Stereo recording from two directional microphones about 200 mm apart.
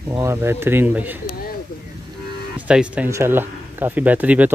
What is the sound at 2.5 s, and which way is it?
Speech, 5° right (ahead or behind).